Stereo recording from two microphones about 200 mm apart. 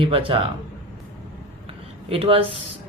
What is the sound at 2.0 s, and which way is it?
Speech, 30° right (ahead or behind).